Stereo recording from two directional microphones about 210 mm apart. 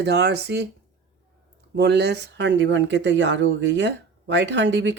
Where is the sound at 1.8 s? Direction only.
55° right (ahead or behind).